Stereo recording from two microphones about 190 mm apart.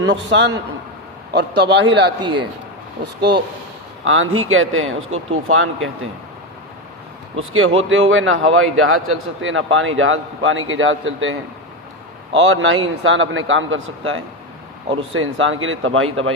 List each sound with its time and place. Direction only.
0.0 s a man's voice: 70° right (ahead or behind)
4.0 s a man's voice: 90° right
7.3 s a man's voice: 90° right